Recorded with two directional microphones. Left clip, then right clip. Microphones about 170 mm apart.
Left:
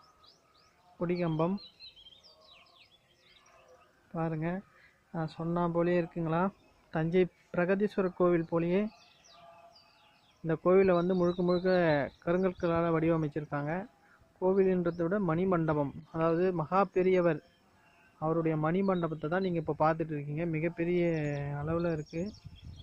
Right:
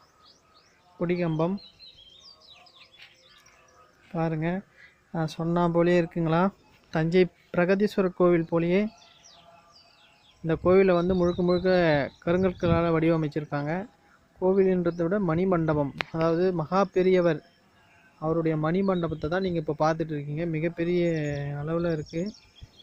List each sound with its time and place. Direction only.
0.9 s speech: 5° right (ahead or behind)
4.1 s speech: 20° right (ahead or behind)
10.4 s speech: 10° right (ahead or behind)